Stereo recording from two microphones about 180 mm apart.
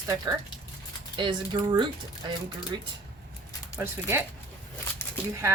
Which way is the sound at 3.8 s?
10° right (ahead or behind).